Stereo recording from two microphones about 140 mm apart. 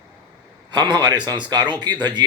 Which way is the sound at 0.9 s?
30° right (ahead or behind).